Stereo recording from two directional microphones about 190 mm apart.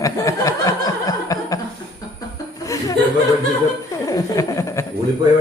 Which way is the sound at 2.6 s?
15° left (ahead or behind).